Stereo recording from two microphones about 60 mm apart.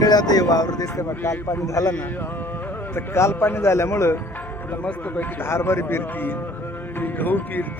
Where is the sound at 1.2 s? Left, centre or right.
Left.